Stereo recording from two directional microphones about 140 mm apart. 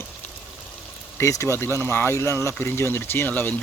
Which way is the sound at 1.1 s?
20° left (ahead or behind).